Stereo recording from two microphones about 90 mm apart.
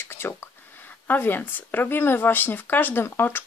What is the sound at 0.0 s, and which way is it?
Speech, 25° left (ahead or behind).